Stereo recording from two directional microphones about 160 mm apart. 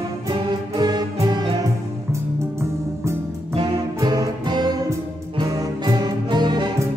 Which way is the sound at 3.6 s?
25° right (ahead or behind).